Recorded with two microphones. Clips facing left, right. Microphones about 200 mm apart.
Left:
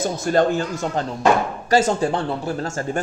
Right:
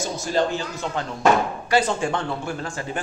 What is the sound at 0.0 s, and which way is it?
Speech, 55° left (ahead or behind).